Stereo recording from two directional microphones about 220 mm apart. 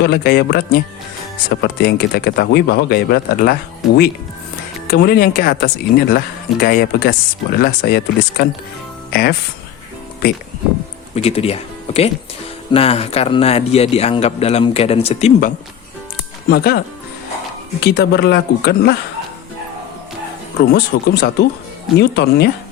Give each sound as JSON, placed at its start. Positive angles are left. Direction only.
{"t": 0.0, "sound": "speech", "side_deg": 45}
{"t": 3.8, "sound": "speech", "side_deg": 0}
{"t": 4.9, "sound": "speech", "side_deg": 45}
{"t": 11.1, "sound": "a man's voice", "side_deg": 25}
{"t": 16.5, "sound": "speech", "side_deg": 45}
{"t": 17.8, "sound": "speech", "side_deg": 45}
{"t": 20.7, "sound": "speech", "side_deg": 45}